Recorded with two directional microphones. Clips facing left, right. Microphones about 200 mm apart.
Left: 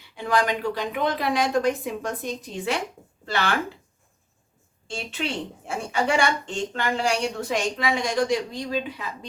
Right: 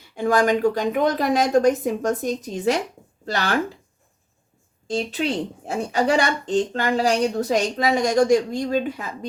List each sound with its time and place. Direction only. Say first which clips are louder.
0.0 s a woman's voice: right 5 dB; 45° right (ahead or behind)
4.9 s speech: right 7 dB; 40° right (ahead or behind)